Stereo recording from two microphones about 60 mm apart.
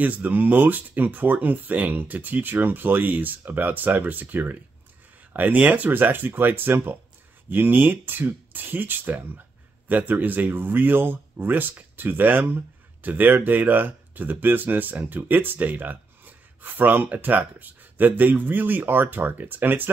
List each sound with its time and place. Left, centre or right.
0.0 s speech: right